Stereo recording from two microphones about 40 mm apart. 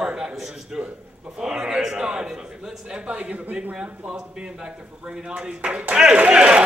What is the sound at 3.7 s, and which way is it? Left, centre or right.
Speech, centre.